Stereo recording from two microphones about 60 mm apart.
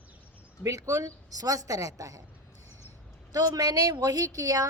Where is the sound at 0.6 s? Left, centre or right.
Right.